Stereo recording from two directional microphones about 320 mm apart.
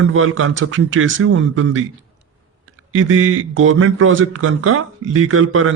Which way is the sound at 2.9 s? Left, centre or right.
Right.